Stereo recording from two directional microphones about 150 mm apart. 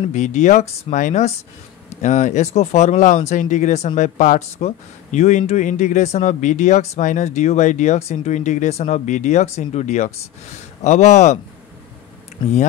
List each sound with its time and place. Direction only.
0.1 s speech: 50° left (ahead or behind)